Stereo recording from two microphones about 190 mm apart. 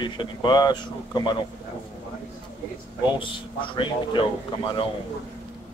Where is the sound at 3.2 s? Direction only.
25° left (ahead or behind).